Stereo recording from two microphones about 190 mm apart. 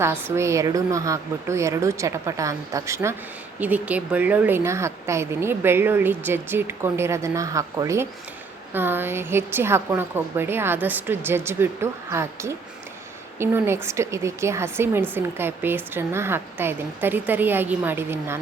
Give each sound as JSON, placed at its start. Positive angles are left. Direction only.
{"t": 0.0, "sound": "speech", "side_deg": -15}